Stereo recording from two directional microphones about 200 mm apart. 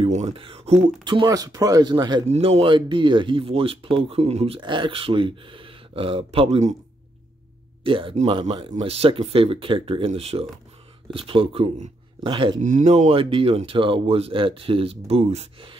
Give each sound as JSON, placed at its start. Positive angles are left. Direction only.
{"t": 0.0, "sound": "speech", "side_deg": -30}
{"t": 2.2, "sound": "speech", "side_deg": -30}
{"t": 7.8, "sound": "speech", "side_deg": -25}
{"t": 12.6, "sound": "speech", "side_deg": -35}